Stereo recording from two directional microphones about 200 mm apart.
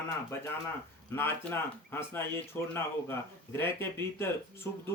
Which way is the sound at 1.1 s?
10° left (ahead or behind).